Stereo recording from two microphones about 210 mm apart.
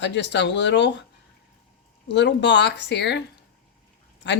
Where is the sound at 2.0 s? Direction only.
55° left (ahead or behind).